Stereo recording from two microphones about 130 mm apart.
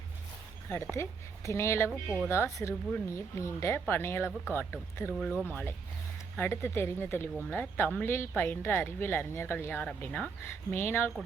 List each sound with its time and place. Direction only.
0.7 s speech: 20° left (ahead or behind)
5.1 s speech: centre (ahead or behind)
5.5 s speech: 15° left (ahead or behind)